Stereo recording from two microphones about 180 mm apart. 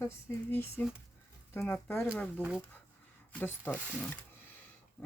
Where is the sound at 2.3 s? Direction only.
10° right (ahead or behind).